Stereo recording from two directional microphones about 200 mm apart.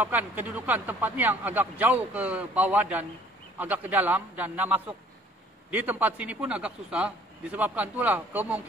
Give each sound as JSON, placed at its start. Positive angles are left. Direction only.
{"t": 0.0, "sound": "a man's voice", "side_deg": -10}